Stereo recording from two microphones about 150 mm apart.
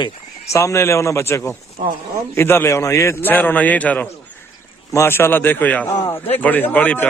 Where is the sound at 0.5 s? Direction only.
20° left (ahead or behind).